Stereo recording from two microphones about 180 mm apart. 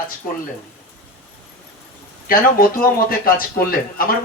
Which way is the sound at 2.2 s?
55° left (ahead or behind).